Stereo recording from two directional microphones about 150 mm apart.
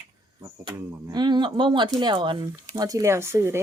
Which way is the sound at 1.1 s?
30° right (ahead or behind).